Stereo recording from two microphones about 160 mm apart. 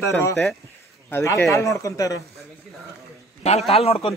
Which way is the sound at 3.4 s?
40° left (ahead or behind).